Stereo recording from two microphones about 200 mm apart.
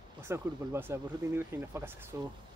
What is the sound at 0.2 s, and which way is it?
Speech, 10° right (ahead or behind).